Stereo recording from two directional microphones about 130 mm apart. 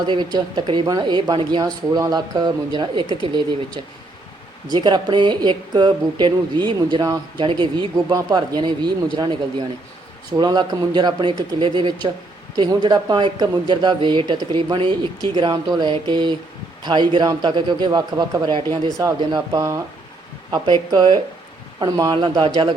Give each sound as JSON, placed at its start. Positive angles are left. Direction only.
{"t": 0.0, "sound": "speech", "side_deg": -35}
{"t": 4.7, "sound": "speech", "side_deg": -35}
{"t": 7.9, "sound": "speech", "side_deg": -25}
{"t": 20.9, "sound": "speech", "side_deg": -30}